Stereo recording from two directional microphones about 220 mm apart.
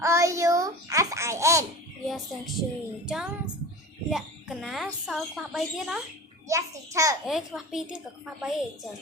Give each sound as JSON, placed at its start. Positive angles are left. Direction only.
{"t": 0.0, "sound": "babbling", "side_deg": -15}
{"t": 2.0, "sound": "music", "side_deg": 0}
{"t": 3.1, "sound": "a woman's voice", "side_deg": -5}
{"t": 6.5, "sound": "a child's voice", "side_deg": -15}
{"t": 7.3, "sound": "a woman's voice", "side_deg": 0}